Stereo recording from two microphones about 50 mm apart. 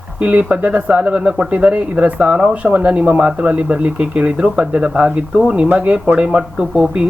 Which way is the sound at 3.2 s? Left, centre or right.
Centre.